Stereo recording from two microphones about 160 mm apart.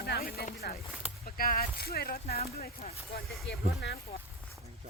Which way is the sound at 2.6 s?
45° left (ahead or behind).